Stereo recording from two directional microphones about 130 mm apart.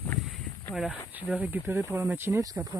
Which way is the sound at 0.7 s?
5° right (ahead or behind).